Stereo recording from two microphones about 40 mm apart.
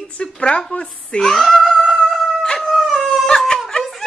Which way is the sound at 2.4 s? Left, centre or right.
Centre.